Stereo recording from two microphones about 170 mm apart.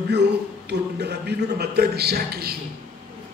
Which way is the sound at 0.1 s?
75° right (ahead or behind).